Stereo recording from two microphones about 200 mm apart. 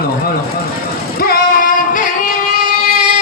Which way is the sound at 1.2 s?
45° left (ahead or behind).